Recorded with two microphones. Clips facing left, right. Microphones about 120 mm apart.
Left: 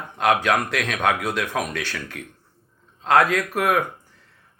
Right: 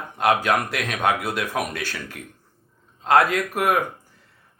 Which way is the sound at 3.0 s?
10° right (ahead or behind).